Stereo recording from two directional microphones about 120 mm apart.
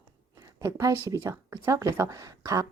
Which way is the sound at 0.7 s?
30° right (ahead or behind).